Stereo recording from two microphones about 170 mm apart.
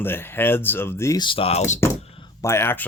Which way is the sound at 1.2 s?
30° left (ahead or behind).